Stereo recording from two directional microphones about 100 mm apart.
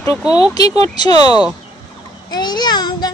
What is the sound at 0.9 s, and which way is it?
Speech, 45° left (ahead or behind).